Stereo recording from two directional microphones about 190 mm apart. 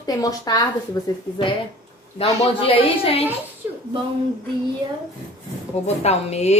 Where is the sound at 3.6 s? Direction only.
10° right (ahead or behind).